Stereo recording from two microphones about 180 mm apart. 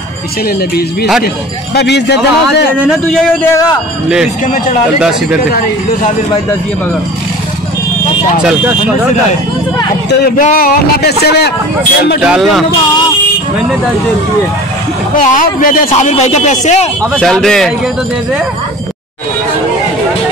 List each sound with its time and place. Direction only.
1.8 s a man's voice: 70° left (ahead or behind)
2.8 s a man's voice: centre (ahead or behind)
8.5 s speech: 5° right (ahead or behind)
10.2 s speech: 55° left (ahead or behind)
12.2 s a man's voice: 5° right (ahead or behind)
15.1 s speech: 50° left (ahead or behind)
15.9 s speech: 40° left (ahead or behind)
17.2 s a man's voice: centre (ahead or behind)